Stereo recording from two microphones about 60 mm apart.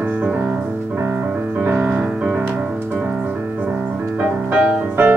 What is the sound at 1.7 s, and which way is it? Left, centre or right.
Music, centre.